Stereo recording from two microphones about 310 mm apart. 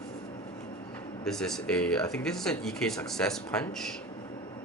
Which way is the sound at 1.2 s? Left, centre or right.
Centre.